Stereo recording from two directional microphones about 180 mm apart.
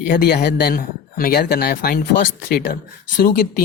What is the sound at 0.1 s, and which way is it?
Speech, 50° left (ahead or behind).